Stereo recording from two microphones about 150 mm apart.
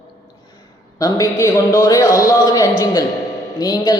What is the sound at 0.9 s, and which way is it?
A man's voice, 25° left (ahead or behind).